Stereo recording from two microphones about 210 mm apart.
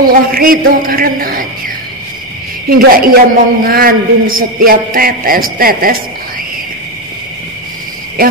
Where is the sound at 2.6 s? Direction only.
45° right (ahead or behind).